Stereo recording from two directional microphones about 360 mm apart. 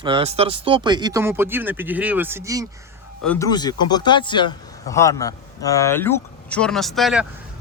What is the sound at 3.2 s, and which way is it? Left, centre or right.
A man's voice, centre.